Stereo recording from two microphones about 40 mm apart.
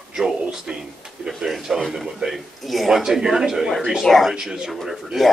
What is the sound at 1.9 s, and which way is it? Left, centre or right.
Speech, centre.